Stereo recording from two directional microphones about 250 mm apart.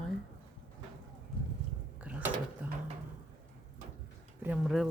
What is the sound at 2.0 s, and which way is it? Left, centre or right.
Mechanisms, centre.